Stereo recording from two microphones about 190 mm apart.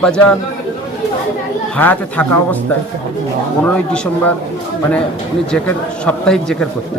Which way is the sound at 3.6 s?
5° left (ahead or behind).